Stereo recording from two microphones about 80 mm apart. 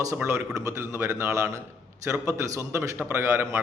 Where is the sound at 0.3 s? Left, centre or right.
Right.